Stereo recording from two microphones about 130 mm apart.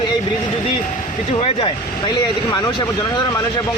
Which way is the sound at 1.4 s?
50° left (ahead or behind).